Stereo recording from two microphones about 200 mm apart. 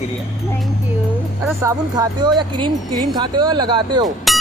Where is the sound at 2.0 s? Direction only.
20° right (ahead or behind).